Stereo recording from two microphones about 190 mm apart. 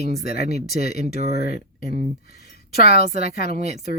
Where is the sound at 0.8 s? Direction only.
35° right (ahead or behind).